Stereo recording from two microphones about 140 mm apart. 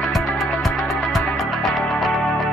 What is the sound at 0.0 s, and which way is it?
Music, centre (ahead or behind).